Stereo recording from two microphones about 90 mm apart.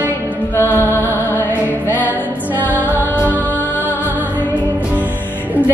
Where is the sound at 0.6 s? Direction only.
25° left (ahead or behind).